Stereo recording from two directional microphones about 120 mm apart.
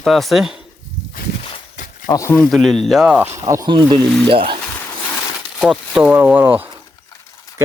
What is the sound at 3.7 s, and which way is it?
Speech, 40° right (ahead or behind).